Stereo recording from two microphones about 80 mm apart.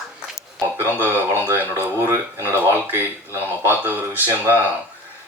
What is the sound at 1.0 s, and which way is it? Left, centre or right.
Speech, right.